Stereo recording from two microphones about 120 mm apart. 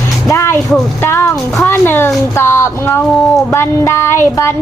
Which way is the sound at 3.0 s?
Centre (ahead or behind).